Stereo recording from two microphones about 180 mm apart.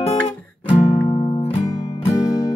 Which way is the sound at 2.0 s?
20° left (ahead or behind).